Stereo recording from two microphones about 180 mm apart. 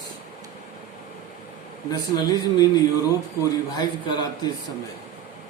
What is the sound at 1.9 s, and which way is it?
Speech, 20° left (ahead or behind).